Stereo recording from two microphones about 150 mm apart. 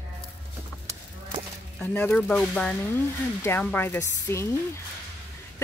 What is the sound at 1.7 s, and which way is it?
Speech, 10° left (ahead or behind).